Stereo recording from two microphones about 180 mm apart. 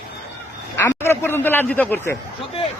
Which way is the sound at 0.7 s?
15° left (ahead or behind).